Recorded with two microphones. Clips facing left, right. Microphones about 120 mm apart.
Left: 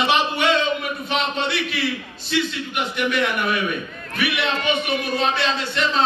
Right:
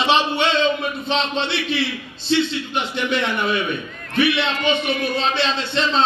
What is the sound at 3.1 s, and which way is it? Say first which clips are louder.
Speech: right 2 dB; 25° right (ahead or behind).